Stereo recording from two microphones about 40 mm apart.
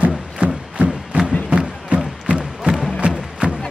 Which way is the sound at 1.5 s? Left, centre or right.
Right.